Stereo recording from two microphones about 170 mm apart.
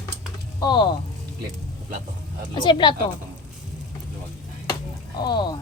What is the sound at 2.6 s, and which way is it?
Speech, 30° left (ahead or behind).